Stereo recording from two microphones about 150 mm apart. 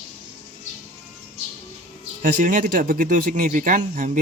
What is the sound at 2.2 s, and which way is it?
Speech, 60° right (ahead or behind).